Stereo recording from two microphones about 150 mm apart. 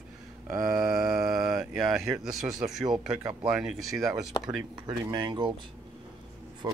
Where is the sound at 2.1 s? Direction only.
Centre (ahead or behind).